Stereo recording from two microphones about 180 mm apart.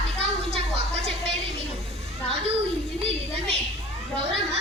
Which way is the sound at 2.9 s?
35° right (ahead or behind).